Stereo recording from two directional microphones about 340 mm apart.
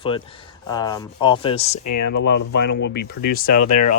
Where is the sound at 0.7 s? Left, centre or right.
Centre.